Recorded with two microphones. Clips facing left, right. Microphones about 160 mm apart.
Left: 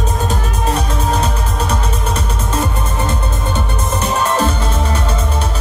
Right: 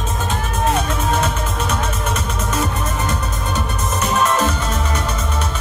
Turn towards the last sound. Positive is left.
turn(degrees=30)  # may be behind; listen again after turning